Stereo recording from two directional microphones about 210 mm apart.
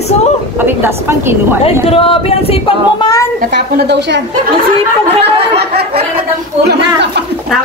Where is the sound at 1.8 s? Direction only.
25° left (ahead or behind).